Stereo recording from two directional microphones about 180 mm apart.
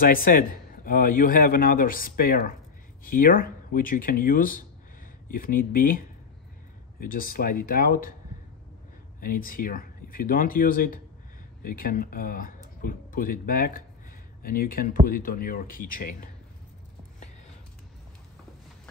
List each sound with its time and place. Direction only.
0.0 s a man's voice: 55° left (ahead or behind)
9.2 s a man's voice: 50° left (ahead or behind)